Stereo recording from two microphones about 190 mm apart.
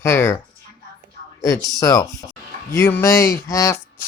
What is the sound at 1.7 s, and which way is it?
Speech, 20° left (ahead or behind).